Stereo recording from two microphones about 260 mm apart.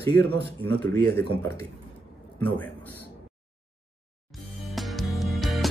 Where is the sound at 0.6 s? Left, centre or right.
Centre.